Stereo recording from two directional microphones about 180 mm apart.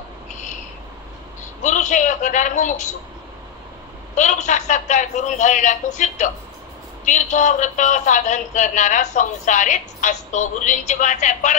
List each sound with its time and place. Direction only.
0.3 s owl: 45° left (ahead or behind)
1.6 s speech: 40° left (ahead or behind)
4.1 s speech: 40° left (ahead or behind)